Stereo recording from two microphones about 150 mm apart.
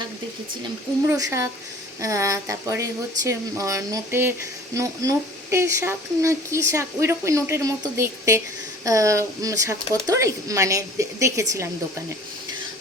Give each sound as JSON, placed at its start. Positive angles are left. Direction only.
{"t": 1.0, "sound": "speech", "side_deg": -20}